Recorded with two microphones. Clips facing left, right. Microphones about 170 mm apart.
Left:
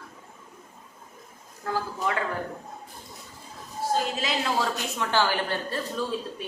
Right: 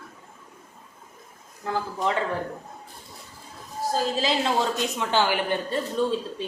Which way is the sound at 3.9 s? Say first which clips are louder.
Right 5 dB; 30° right (ahead or behind).